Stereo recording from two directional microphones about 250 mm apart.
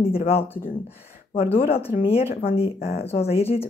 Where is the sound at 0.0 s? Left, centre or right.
Left.